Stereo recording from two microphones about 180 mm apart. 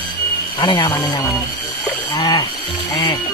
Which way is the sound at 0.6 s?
20° left (ahead or behind).